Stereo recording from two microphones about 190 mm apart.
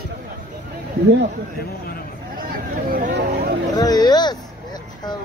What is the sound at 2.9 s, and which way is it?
Vehicle, 50° right (ahead or behind).